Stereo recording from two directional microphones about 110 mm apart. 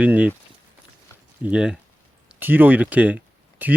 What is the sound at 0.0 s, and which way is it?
Speech, 15° right (ahead or behind).